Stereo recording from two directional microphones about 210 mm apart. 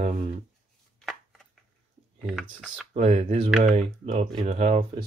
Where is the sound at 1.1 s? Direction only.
Centre (ahead or behind).